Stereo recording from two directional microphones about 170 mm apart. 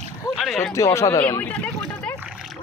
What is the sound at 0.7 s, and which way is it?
Speech, 15° left (ahead or behind).